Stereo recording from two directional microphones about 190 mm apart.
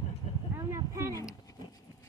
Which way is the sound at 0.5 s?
15° right (ahead or behind).